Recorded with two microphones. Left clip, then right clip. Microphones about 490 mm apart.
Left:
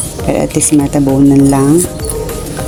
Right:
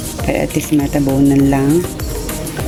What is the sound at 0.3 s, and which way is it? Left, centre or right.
Speech, right.